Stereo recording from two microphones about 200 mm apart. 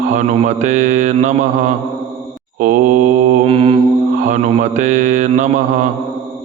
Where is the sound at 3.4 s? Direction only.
30° right (ahead or behind).